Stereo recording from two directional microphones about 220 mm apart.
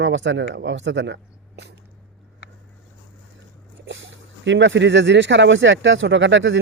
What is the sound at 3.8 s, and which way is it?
Speech, 55° right (ahead or behind).